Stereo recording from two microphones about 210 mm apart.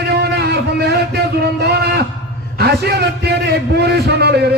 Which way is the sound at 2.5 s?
50° right (ahead or behind).